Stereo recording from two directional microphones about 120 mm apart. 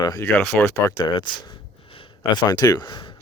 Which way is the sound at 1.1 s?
40° left (ahead or behind).